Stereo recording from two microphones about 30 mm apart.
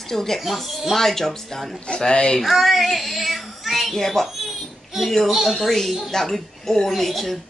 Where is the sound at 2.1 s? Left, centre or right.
Left.